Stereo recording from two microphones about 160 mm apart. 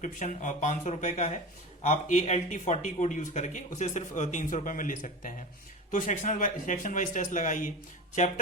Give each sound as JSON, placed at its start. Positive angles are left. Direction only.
{"t": 0.0, "sound": "speech", "side_deg": 55}